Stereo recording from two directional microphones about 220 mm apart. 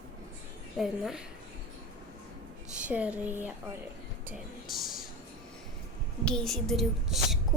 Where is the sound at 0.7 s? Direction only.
Centre (ahead or behind).